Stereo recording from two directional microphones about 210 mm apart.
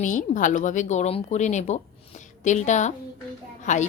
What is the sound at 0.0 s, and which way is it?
Speech, 35° left (ahead or behind).